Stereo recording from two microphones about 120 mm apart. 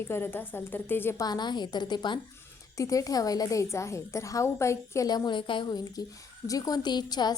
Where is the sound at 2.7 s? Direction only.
25° left (ahead or behind).